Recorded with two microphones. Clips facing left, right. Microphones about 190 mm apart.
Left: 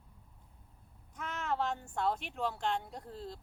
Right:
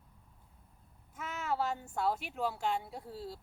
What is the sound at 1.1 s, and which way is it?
Speech, 5° right (ahead or behind).